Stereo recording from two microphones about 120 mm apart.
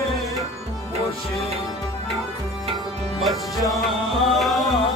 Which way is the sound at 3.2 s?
Centre (ahead or behind).